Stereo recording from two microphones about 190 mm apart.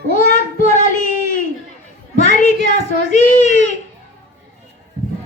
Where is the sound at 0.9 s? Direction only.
45° left (ahead or behind).